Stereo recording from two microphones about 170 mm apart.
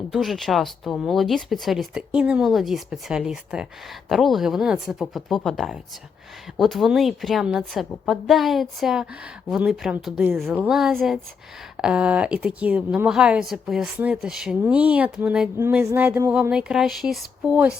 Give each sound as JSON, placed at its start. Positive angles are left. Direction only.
{"t": 0.1, "sound": "a woman's voice", "side_deg": 0}